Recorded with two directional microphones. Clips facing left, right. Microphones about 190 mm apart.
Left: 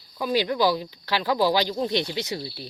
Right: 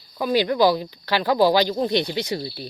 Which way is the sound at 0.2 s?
55° right (ahead or behind).